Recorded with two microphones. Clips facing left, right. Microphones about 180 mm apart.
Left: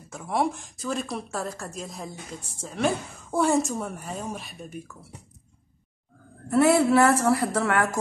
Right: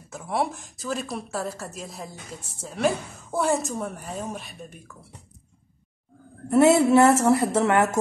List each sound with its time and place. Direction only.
0.1 s a woman's voice: centre (ahead or behind)
6.5 s a woman's voice: 20° right (ahead or behind)